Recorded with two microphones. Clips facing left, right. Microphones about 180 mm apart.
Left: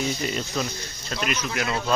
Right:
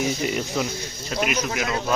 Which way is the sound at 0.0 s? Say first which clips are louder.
Right 3 dB; 20° right (ahead or behind).